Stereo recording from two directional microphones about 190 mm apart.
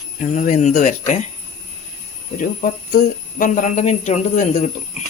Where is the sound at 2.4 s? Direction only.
45° left (ahead or behind).